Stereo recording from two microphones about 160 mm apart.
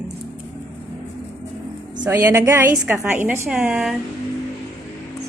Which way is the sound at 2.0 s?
15° right (ahead or behind).